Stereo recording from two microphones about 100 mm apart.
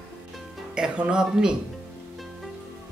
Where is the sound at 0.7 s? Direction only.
10° right (ahead or behind).